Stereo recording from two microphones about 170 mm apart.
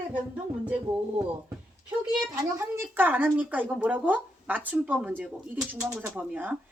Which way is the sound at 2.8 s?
10° right (ahead or behind).